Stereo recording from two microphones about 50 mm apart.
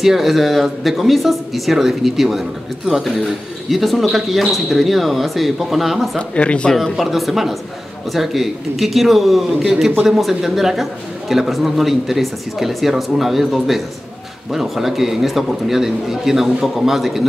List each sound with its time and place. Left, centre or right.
0.0 s a man's voice: centre
6.1 s speech: left
7.0 s a man's voice: centre